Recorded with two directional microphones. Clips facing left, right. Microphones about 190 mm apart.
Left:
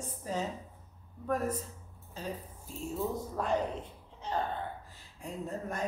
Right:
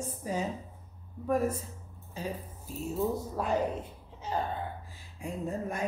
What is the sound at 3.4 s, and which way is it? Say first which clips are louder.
A woman's voice: right 1 dB; 5° right (ahead or behind).